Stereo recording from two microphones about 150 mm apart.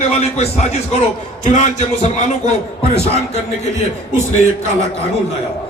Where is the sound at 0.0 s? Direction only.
45° left (ahead or behind).